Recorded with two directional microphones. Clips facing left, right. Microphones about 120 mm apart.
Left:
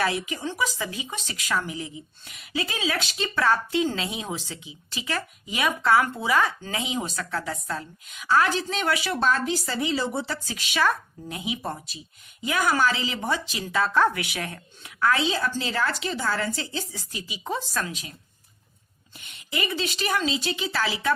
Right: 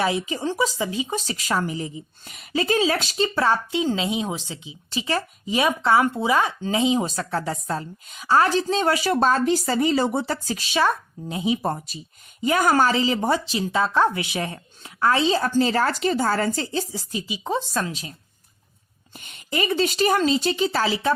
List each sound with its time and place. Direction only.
0.0 s a woman's voice: 25° right (ahead or behind); by 3.2 s 40° right (ahead or behind)
3.2 s a woman's voice: 25° right (ahead or behind)
11.5 s a woman's voice: 40° right (ahead or behind)
15.3 s a woman's voice: 40° right (ahead or behind)
19.2 s a woman's voice: 45° right (ahead or behind)